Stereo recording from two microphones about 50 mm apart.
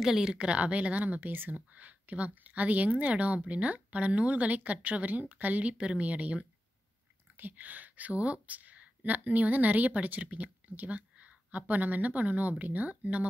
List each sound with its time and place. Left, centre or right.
0.0 s speech: centre
0.4 s speech: right